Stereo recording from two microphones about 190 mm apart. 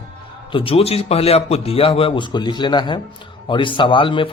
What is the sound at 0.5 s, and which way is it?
Speech, 30° left (ahead or behind).